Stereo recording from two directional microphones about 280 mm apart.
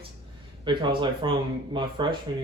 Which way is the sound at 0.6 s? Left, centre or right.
Centre.